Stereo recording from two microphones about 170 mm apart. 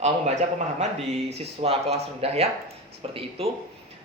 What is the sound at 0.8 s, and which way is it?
Speech, 45° right (ahead or behind).